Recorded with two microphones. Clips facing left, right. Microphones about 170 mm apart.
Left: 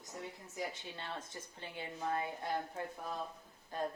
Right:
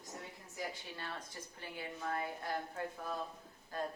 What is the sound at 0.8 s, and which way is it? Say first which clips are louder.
A woman's voice: left 1 dB; 25° left (ahead or behind).